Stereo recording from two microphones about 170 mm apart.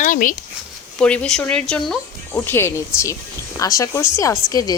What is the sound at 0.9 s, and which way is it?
Speech, 5° left (ahead or behind).